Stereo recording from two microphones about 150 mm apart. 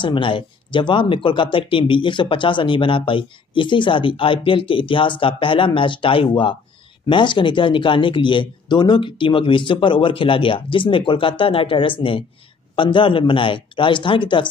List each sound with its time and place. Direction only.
0.0 s speech: 35° left (ahead or behind)